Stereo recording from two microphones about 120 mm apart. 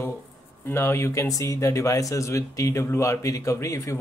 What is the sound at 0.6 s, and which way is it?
Speech, 20° left (ahead or behind).